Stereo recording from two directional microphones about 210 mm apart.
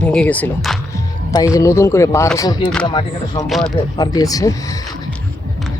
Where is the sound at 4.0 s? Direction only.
20° left (ahead or behind).